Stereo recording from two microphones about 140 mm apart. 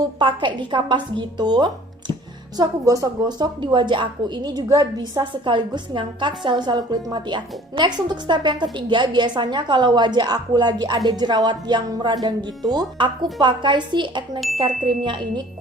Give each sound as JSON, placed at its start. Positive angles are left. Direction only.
{"t": 0.0, "sound": "a woman's voice", "side_deg": -35}